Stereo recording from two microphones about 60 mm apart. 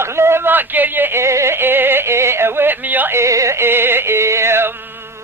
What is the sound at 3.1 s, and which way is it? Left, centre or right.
Music, right.